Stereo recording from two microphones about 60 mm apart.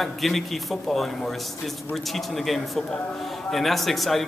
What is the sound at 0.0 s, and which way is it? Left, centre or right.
Speech, centre.